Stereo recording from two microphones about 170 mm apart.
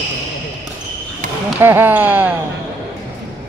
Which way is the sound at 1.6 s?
15° right (ahead or behind).